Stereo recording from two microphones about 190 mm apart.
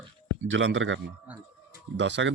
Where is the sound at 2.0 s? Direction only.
70° right (ahead or behind).